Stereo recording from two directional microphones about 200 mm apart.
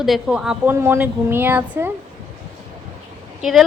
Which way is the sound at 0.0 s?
Centre (ahead or behind).